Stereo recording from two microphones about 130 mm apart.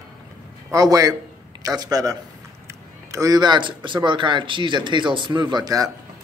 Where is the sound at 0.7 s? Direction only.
25° right (ahead or behind).